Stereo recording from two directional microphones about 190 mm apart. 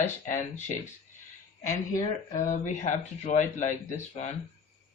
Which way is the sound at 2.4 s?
40° left (ahead or behind).